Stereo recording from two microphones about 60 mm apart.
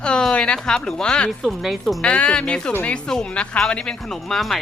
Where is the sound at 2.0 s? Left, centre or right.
Centre.